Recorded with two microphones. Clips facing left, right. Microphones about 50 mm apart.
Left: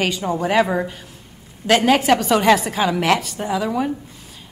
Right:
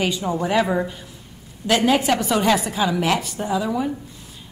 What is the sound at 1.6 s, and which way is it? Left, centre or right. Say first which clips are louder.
A woman's voice: left 3 dB; left.